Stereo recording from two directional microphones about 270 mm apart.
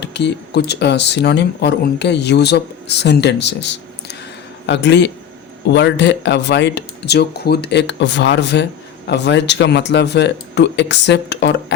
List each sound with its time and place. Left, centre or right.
0.0 s speech: left